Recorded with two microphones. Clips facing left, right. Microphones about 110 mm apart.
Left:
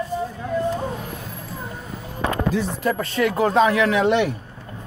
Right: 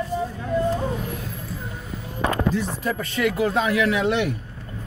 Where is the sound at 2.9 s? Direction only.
45° left (ahead or behind).